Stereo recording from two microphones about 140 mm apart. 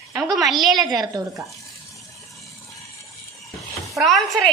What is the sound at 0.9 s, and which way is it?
Speech, 30° right (ahead or behind).